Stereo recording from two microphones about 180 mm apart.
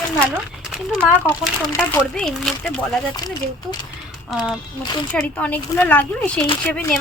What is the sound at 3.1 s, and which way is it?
Speech, 20° left (ahead or behind).